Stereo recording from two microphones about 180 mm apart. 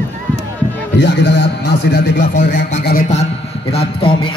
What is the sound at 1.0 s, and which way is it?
A man's voice, 75° left (ahead or behind).